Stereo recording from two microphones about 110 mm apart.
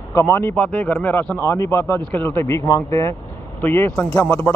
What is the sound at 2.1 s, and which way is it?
Speech, 15° left (ahead or behind).